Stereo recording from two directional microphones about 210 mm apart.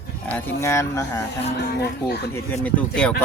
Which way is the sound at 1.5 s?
50° left (ahead or behind).